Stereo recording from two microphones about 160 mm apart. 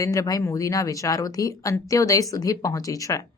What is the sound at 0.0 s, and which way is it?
Speech, 20° left (ahead or behind).